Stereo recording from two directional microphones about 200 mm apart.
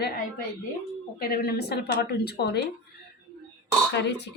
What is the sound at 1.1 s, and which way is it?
A woman's voice, 50° left (ahead or behind).